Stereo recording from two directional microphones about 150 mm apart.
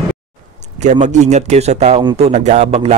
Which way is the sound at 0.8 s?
50° right (ahead or behind).